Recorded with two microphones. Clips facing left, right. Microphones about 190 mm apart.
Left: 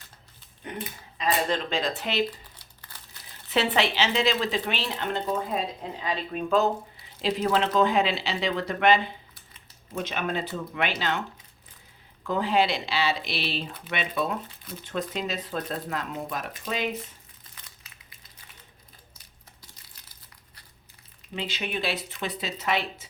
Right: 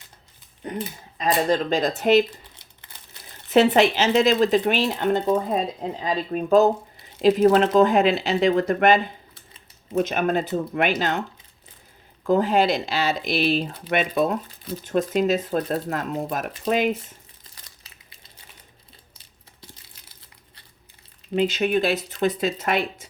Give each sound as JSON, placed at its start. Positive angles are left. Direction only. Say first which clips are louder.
{"t": 0.6, "sound": "speech", "louder": "right 6 dB", "side_deg": -35}
{"t": 2.6, "sound": "crumpling", "louder": "even", "side_deg": -20}
{"t": 3.5, "sound": "speech", "louder": "right 8 dB", "side_deg": -45}
{"t": 12.2, "sound": "speech", "louder": "right 5 dB", "side_deg": -45}
{"t": 17.5, "sound": "crumpling", "louder": "right 1 dB", "side_deg": -35}
{"t": 21.3, "sound": "speech", "louder": "right 11 dB", "side_deg": -45}